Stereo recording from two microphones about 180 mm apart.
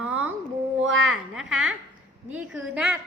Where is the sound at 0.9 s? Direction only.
90° right.